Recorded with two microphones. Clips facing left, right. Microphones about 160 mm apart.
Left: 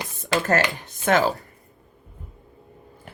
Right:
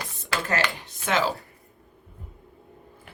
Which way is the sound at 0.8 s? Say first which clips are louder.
Left 5 dB; 50° left (ahead or behind).